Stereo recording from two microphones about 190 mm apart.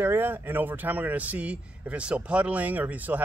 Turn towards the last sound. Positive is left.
turn(degrees=-10)  # may be behind; listen again after turning